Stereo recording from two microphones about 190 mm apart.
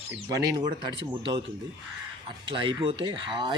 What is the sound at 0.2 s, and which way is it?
Speech, 25° right (ahead or behind).